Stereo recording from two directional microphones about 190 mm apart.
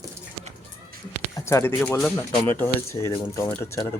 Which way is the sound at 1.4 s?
15° left (ahead or behind).